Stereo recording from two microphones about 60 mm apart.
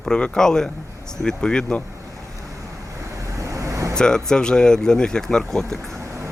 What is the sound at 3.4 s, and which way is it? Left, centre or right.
Vehicle, right.